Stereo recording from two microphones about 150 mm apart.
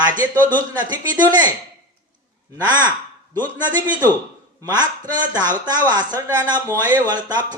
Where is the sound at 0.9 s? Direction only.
30° right (ahead or behind).